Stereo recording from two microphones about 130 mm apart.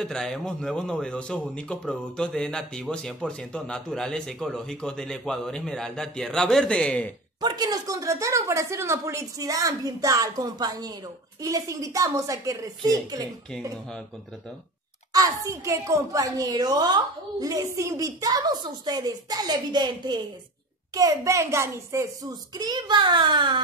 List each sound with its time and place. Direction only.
0.0 s a man's voice: 5° left (ahead or behind)
7.3 s a woman's voice: 35° right (ahead or behind)
15.1 s a woman's voice: 25° right (ahead or behind)